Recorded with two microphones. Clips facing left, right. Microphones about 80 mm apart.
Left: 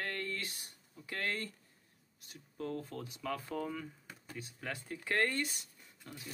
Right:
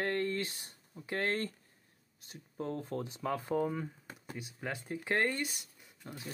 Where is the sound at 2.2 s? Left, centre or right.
Right.